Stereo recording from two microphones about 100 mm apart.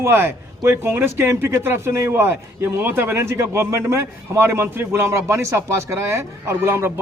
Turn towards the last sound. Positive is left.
turn(degrees=-25)  # may be behind; listen again after turning